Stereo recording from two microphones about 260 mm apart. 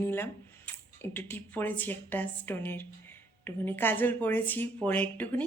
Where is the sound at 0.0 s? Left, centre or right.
Centre.